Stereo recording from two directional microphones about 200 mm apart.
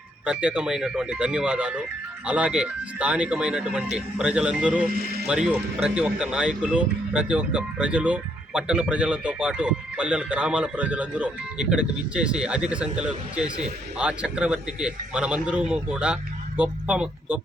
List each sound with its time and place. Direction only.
0.3 s speech: 5° right (ahead or behind)
4.9 s speech: 50° right (ahead or behind)
5.2 s speech: 5° right (ahead or behind)